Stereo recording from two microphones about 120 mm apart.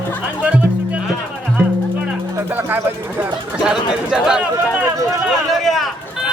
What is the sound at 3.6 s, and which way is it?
Speech, 5° right (ahead or behind).